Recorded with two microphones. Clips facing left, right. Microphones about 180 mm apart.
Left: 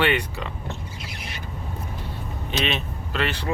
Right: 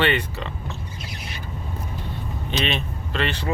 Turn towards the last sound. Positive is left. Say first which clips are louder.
# right 1 dB
turn(degrees=10)  # may be behind; listen again after turning